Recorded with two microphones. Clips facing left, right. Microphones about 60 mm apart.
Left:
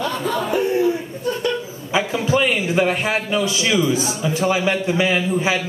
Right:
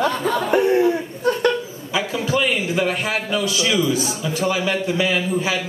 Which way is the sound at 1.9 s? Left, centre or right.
Left.